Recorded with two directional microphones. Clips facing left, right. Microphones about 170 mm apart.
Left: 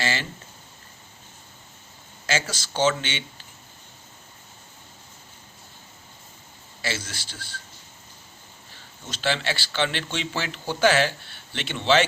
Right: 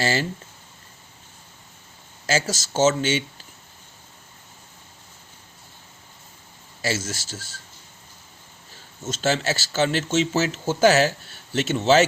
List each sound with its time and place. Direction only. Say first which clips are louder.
0.0 s speech: right 5 dB; 40° right (ahead or behind)
2.2 s speech: right 4 dB; 40° right (ahead or behind)
6.8 s speech: right 5 dB; 45° right (ahead or behind)
9.0 s speech: right 4 dB; 45° right (ahead or behind)